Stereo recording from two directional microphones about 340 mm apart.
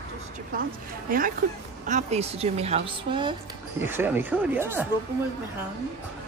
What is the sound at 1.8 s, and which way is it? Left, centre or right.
Speech, centre.